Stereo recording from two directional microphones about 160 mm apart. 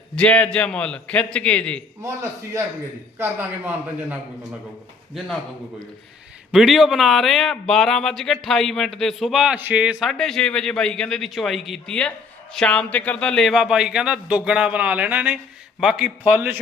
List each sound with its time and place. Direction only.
0.2 s a man's voice: 10° left (ahead or behind)
2.0 s a man's voice: 20° right (ahead or behind)
6.5 s a man's voice: centre (ahead or behind)